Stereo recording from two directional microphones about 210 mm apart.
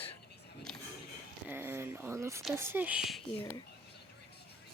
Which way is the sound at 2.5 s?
10° right (ahead or behind).